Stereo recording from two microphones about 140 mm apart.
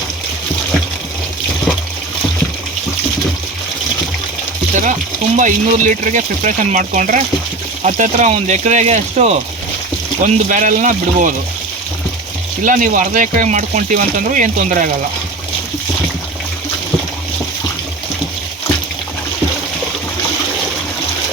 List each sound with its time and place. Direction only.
4.7 s stir: 65° right (ahead or behind)
5.4 s speech: 60° right (ahead or behind)
10.2 s speech: 65° right (ahead or behind)
12.6 s speech: 70° right (ahead or behind)